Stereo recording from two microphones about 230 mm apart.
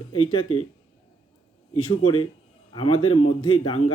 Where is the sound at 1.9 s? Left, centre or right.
Left.